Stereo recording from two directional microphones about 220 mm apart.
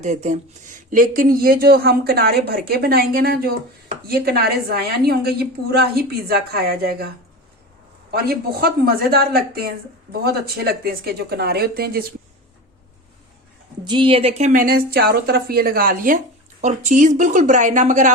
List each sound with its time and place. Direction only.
0.0 s a woman's voice: 30° right (ahead or behind)
8.1 s speech: 45° right (ahead or behind)
13.8 s a woman's voice: 20° right (ahead or behind)